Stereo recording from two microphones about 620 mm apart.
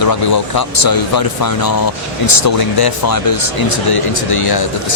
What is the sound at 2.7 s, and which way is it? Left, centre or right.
Speech, left.